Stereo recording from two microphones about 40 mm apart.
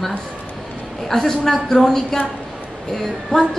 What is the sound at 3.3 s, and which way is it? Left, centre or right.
Speech, centre.